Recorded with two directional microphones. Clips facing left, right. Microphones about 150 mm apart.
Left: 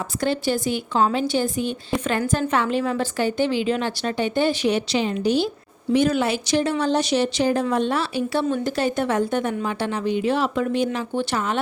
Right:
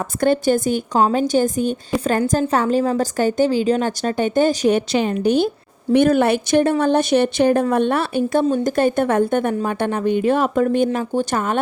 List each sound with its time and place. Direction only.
0.2 s speech: 50° right (ahead or behind)